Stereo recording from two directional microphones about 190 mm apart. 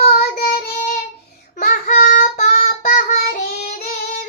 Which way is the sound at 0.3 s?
50° left (ahead or behind).